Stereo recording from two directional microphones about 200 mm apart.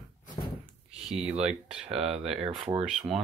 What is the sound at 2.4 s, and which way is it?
Speech, 25° right (ahead or behind).